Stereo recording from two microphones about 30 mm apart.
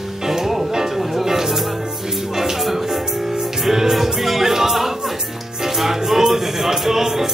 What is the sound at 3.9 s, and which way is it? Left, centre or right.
Music, centre.